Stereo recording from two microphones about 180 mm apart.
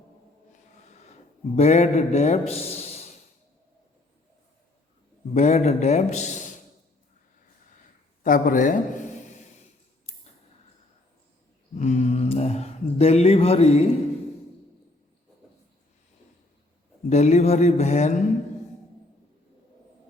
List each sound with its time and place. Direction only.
1.5 s a man's voice: 40° left (ahead or behind)
2.5 s a sound: 35° left (ahead or behind)
5.3 s a man's voice: 40° left (ahead or behind)
8.2 s speech: 50° left (ahead or behind)
11.8 s mantra: 40° left (ahead or behind)
17.1 s a man's voice: 40° left (ahead or behind)